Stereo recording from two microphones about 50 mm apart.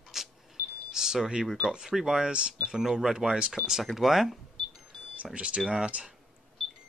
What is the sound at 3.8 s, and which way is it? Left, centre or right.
Speech, centre.